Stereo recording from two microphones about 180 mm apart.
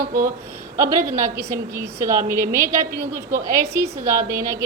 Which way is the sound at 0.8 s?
15° right (ahead or behind).